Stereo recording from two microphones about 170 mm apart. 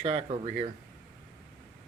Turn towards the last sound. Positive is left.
turn(degrees=-35)  # may be behind; listen again after turning